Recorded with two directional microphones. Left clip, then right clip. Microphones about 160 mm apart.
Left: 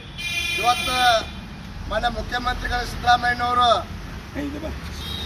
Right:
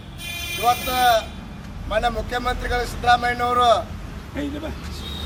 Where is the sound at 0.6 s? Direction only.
15° right (ahead or behind).